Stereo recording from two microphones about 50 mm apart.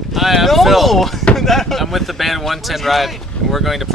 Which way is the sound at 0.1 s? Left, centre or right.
Centre.